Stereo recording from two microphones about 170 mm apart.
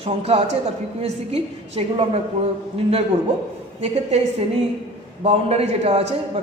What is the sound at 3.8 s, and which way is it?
A man's voice, 40° right (ahead or behind).